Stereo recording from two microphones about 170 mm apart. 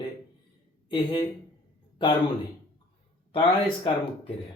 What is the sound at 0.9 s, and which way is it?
Speech, 30° left (ahead or behind).